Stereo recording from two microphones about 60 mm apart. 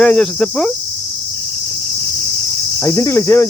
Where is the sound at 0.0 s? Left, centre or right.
Centre.